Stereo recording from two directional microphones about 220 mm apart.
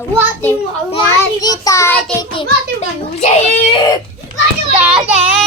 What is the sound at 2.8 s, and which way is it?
Speech, 30° left (ahead or behind).